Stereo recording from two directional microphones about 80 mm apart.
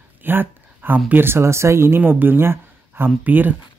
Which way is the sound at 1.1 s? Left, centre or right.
Right.